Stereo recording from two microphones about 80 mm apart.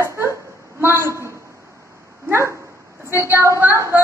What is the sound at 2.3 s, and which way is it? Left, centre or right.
A woman's voice, right.